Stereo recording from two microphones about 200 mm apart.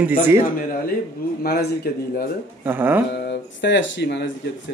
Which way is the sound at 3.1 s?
60° left (ahead or behind).